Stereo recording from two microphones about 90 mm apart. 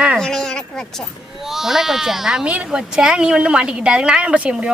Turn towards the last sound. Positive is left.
turn(degrees=-15)  # may be behind; listen again after turning